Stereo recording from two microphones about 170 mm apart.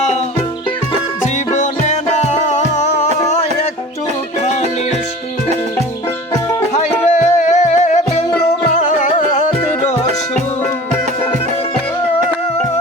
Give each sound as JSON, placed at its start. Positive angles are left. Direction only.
{"t": 1.5, "sound": "music", "side_deg": 45}
{"t": 7.1, "sound": "music", "side_deg": 45}